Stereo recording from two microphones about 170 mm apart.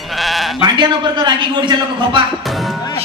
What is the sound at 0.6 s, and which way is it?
A man's voice, 25° right (ahead or behind).